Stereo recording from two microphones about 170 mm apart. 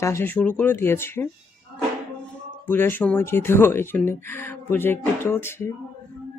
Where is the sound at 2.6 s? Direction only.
10° left (ahead or behind).